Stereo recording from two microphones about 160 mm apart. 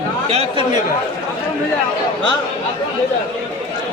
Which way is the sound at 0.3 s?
40° right (ahead or behind).